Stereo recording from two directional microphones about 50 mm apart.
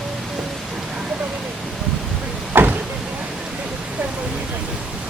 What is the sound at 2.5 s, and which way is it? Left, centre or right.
Vehicle, right.